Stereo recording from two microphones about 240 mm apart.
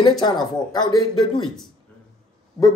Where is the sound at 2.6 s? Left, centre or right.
Centre.